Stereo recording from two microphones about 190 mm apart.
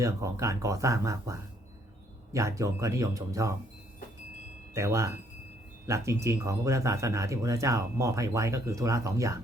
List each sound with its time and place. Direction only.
0.0 s speech: 15° right (ahead or behind)
4.7 s speech: 15° right (ahead or behind)